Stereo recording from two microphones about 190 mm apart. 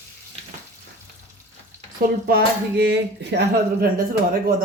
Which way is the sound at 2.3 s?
55° right (ahead or behind).